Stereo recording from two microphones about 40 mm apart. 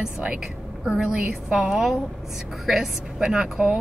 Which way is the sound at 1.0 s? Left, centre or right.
Centre.